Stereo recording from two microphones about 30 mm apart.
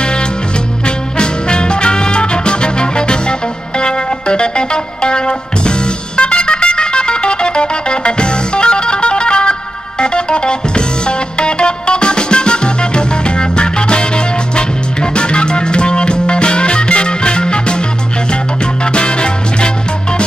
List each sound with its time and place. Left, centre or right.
0.8 s music: left
18.9 s music: left